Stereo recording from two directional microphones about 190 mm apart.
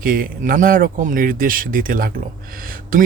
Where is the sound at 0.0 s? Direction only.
50° right (ahead or behind).